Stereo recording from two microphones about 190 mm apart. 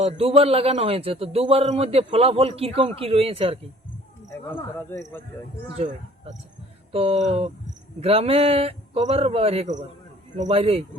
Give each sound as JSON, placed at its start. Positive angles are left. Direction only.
{"t": 0.0, "sound": "a man's voice", "side_deg": -30}
{"t": 4.3, "sound": "speech", "side_deg": 10}
{"t": 5.7, "sound": "a man's voice", "side_deg": -35}